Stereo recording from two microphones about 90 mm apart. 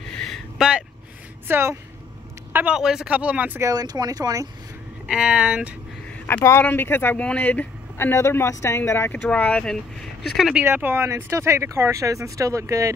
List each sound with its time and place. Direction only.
0.6 s speech: 10° right (ahead or behind)
1.5 s speech: 30° right (ahead or behind)
2.5 s speech: 15° right (ahead or behind)
3.6 s speech: 45° right (ahead or behind)
5.0 s speech: 10° right (ahead or behind)
6.3 s speech: 25° left (ahead or behind)
9.1 s speech: 20° left (ahead or behind)
10.6 s speech: 25° right (ahead or behind)